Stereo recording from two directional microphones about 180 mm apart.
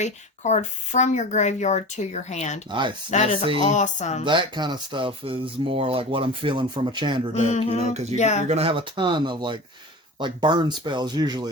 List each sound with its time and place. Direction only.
0.0 s a woman's voice: 40° left (ahead or behind)
2.6 s speech: 25° right (ahead or behind)
3.1 s a woman's voice: 40° left (ahead or behind)
4.3 s speech: 25° right (ahead or behind)
7.3 s a woman's voice: 40° left (ahead or behind)
8.4 s speech: 35° right (ahead or behind)